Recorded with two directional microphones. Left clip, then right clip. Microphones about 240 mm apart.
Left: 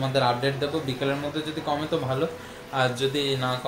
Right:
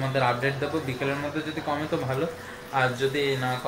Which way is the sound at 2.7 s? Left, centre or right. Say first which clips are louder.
Even; centre.